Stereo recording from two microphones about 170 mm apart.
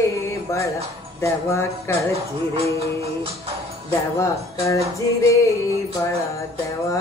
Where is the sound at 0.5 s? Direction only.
15° left (ahead or behind).